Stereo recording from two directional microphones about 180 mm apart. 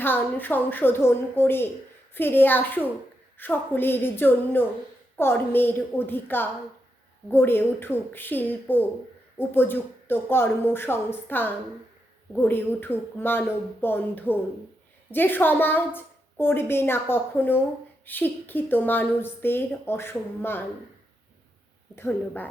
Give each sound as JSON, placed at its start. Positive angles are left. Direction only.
{"t": 0.0, "sound": "a woman's voice", "side_deg": 10}
{"t": 21.9, "sound": "a woman's voice", "side_deg": 10}